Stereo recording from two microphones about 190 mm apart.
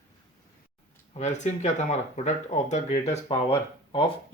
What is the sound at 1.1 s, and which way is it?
Speech, 35° left (ahead or behind).